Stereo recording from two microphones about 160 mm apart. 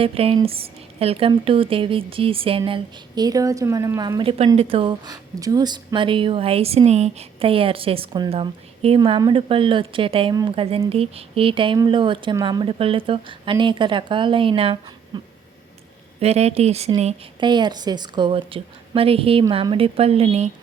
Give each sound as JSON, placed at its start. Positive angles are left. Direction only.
{"t": 0.0, "sound": "speech", "side_deg": -35}
{"t": 4.2, "sound": "speech", "side_deg": -35}
{"t": 9.0, "sound": "speech", "side_deg": -30}
{"t": 16.2, "sound": "speech", "side_deg": -40}
{"t": 17.4, "sound": "speech", "side_deg": -30}